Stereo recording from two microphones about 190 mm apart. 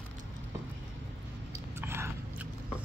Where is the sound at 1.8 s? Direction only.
15° right (ahead or behind).